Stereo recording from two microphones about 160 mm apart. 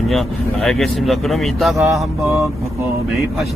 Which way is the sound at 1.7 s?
20° right (ahead or behind).